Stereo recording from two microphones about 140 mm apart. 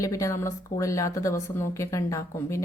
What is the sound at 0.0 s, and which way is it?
Speech, 20° left (ahead or behind).